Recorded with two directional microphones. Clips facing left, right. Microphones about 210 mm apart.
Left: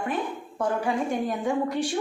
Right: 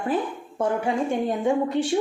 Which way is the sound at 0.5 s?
25° right (ahead or behind).